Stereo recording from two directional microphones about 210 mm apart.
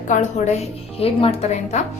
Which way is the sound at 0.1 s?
35° left (ahead or behind).